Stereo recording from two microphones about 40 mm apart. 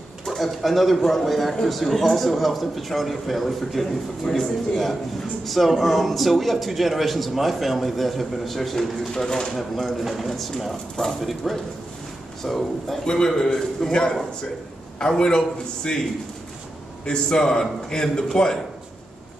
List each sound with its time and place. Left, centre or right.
0.2 s a man's voice: centre
9.6 s a man's voice: centre
13.0 s a man's voice: centre